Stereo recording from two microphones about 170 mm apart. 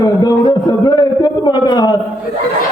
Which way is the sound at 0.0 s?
25° left (ahead or behind).